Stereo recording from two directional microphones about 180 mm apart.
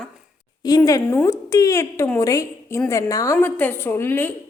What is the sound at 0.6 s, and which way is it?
A woman's voice, 20° left (ahead or behind).